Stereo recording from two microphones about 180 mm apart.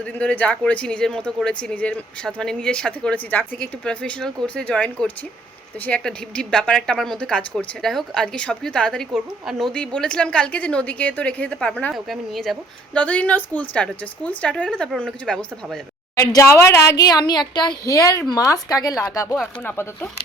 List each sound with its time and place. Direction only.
0.0 s a woman's voice: 5° left (ahead or behind)
16.1 s speech: 15° left (ahead or behind)